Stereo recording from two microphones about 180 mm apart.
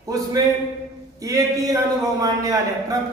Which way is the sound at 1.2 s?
20° right (ahead or behind).